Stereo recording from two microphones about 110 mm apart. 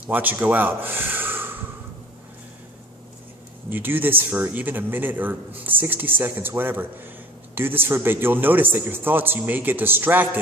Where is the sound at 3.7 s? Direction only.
20° right (ahead or behind).